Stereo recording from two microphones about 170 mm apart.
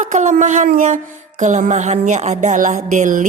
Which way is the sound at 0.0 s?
45° right (ahead or behind).